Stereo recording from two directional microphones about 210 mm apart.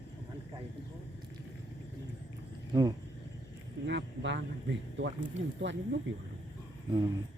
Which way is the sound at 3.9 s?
55° right (ahead or behind).